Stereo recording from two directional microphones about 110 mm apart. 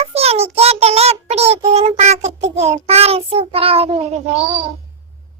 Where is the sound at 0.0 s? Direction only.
70° right (ahead or behind).